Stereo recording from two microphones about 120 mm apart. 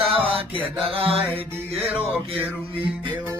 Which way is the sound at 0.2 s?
50° right (ahead or behind).